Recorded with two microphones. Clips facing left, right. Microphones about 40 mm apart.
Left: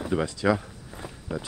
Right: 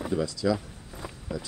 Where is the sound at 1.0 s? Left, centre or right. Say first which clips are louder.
Left 2 dB; left.